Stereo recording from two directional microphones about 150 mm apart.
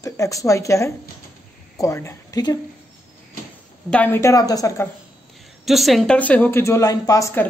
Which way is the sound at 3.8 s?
10° left (ahead or behind).